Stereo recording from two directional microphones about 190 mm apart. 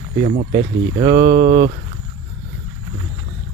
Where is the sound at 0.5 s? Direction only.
30° right (ahead or behind).